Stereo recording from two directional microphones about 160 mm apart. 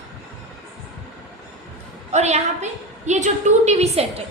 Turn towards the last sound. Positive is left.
turn(degrees=-40)  # may be behind; listen again after turning